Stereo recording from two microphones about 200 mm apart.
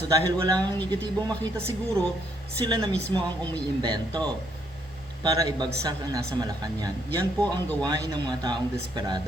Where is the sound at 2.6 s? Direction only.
20° right (ahead or behind).